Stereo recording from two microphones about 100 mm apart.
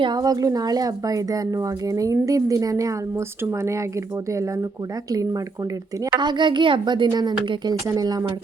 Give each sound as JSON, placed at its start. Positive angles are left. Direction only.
{"t": 0.0, "sound": "speech", "side_deg": -40}
{"t": 5.1, "sound": "speech", "side_deg": -35}
{"t": 6.1, "sound": "a woman's voice", "side_deg": -50}